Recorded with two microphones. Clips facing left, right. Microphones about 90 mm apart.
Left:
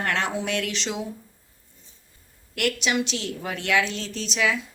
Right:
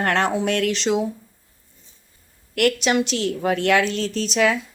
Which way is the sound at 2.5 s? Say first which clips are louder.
Right 6 dB; 50° right (ahead or behind).